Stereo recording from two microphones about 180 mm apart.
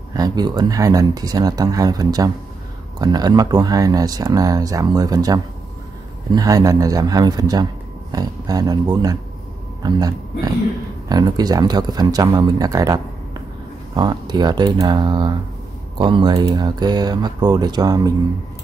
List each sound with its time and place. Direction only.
0.1 s speech: 20° right (ahead or behind)